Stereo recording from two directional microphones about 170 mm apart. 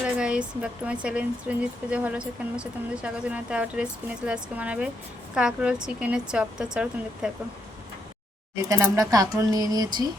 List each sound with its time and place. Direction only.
0.0 s speech: 5° right (ahead or behind)
8.7 s speech: 20° right (ahead or behind)